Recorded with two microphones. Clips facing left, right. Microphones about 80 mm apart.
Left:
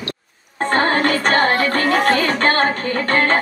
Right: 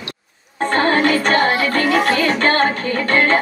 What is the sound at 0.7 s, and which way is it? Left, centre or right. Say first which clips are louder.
Music: right 1 dB; left.